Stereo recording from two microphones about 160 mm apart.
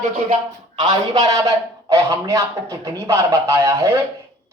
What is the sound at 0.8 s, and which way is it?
A man's voice, 25° right (ahead or behind).